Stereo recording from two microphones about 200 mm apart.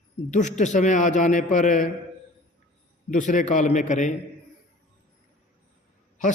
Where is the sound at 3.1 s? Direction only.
40° left (ahead or behind).